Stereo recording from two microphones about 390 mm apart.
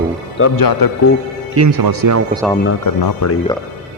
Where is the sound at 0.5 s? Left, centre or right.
Left.